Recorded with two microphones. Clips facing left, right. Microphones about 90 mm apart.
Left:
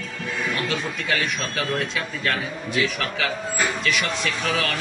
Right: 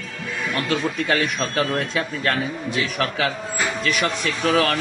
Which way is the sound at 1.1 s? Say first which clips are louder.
Right 2 dB; 35° right (ahead or behind).